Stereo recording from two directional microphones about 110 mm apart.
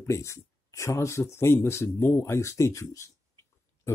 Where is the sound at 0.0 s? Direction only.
25° left (ahead or behind).